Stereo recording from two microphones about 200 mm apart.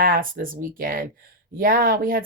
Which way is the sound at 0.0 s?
45° right (ahead or behind).